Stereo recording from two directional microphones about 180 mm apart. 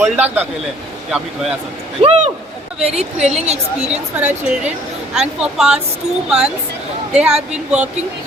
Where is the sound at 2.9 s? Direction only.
5° right (ahead or behind).